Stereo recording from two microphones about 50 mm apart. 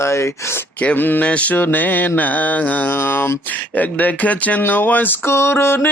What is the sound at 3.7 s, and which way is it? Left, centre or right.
Mantra, left.